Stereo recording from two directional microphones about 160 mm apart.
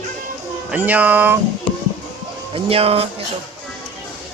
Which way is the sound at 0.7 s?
10° right (ahead or behind).